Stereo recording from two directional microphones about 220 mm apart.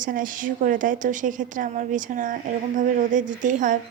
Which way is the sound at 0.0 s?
40° right (ahead or behind).